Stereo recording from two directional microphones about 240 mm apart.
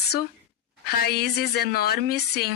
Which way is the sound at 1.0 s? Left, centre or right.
Left.